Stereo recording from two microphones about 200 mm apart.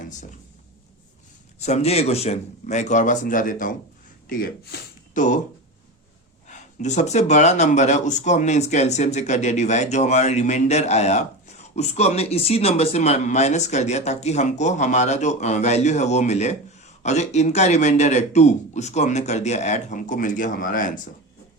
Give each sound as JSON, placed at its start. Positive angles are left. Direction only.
{"t": 1.5, "sound": "speech", "side_deg": 35}
{"t": 6.5, "sound": "speech", "side_deg": 35}